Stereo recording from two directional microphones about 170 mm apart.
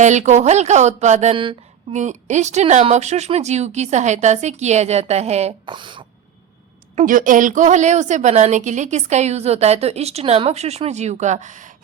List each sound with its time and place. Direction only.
0.0 s speech: 45° right (ahead or behind)
2.0 s speech: 45° right (ahead or behind); by 6.1 s 30° right (ahead or behind)
6.9 s a woman's voice: 50° right (ahead or behind)